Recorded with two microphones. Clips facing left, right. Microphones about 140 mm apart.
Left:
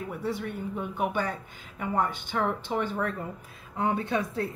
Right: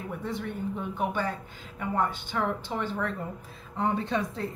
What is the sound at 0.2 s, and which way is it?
Speech, 10° left (ahead or behind).